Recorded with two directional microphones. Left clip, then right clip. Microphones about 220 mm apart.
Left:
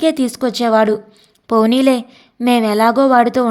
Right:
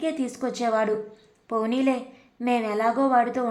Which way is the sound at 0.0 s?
40° left (ahead or behind).